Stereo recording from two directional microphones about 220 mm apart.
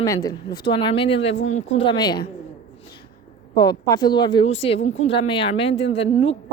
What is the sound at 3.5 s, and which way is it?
Speech, 15° left (ahead or behind).